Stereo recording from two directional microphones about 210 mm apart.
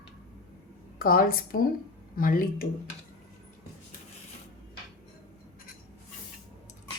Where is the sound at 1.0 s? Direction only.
45° left (ahead or behind).